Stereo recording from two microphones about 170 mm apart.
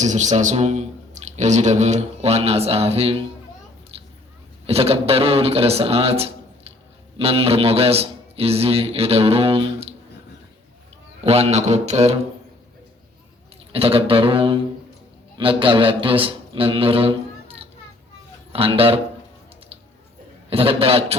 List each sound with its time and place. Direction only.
0.0 s a man's voice: 45° right (ahead or behind)
4.6 s a man's voice: 35° right (ahead or behind)
11.2 s a man's voice: 35° right (ahead or behind)
13.7 s a man's voice: 35° right (ahead or behind)
20.5 s a man's voice: 35° right (ahead or behind)